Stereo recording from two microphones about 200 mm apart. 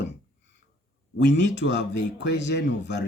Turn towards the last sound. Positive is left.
turn(degrees=60)  # may be behind; listen again after turning